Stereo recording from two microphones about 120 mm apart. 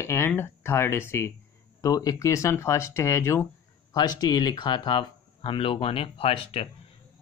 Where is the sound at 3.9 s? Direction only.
35° left (ahead or behind); by 6.7 s 50° left (ahead or behind).